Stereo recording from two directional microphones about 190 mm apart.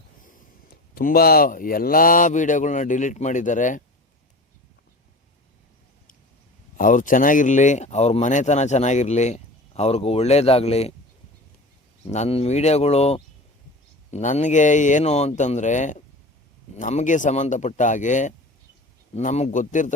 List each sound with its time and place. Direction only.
0.9 s speech: 50° left (ahead or behind)
6.7 s speech: 45° left (ahead or behind)
12.0 s speech: 35° left (ahead or behind)